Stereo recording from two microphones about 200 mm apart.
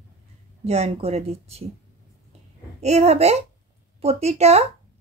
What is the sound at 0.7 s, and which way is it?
Speech, 30° right (ahead or behind).